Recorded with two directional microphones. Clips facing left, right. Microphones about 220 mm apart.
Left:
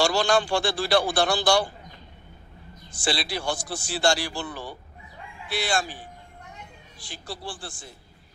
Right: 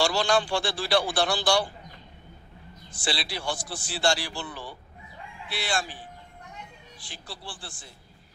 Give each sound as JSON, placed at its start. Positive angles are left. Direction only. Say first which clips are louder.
{"t": 0.0, "sound": "speech", "louder": "left 2 dB", "side_deg": 45}
{"t": 2.9, "sound": "speech", "louder": "left 4 dB", "side_deg": 45}
{"t": 7.0, "sound": "speech", "louder": "left 6 dB", "side_deg": 45}